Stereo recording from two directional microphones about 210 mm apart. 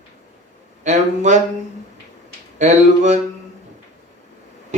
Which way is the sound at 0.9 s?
35° right (ahead or behind).